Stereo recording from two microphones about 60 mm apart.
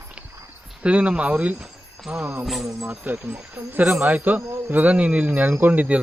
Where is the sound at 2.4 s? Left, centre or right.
Centre.